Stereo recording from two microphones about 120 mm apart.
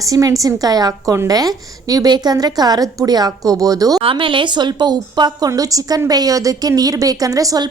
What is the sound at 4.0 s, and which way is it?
A woman's voice, 45° right (ahead or behind).